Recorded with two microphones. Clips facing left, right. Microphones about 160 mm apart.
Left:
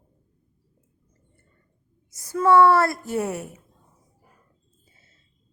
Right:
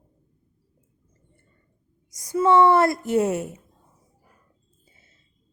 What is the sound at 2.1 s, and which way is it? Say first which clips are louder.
A woman's voice: even; 15° right (ahead or behind).